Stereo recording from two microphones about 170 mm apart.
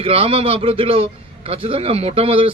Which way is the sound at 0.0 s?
35° right (ahead or behind).